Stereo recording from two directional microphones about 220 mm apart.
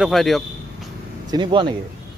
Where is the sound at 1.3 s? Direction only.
20° right (ahead or behind).